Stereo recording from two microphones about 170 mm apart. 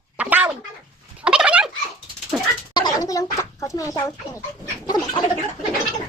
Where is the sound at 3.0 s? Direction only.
20° left (ahead or behind).